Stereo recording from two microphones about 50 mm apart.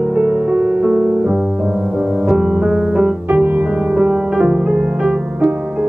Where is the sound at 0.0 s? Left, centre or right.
Centre.